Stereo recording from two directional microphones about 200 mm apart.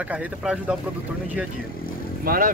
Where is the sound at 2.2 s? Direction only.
45° right (ahead or behind).